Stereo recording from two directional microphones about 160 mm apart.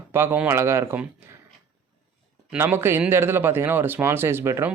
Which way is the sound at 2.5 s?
15° right (ahead or behind).